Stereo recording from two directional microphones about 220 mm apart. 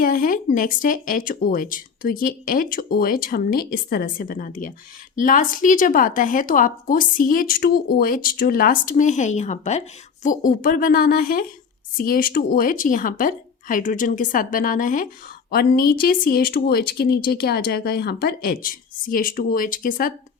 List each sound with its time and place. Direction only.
0.0 s speech: 40° left (ahead or behind)